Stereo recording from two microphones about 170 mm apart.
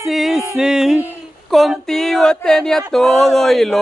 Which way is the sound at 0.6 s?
5° right (ahead or behind).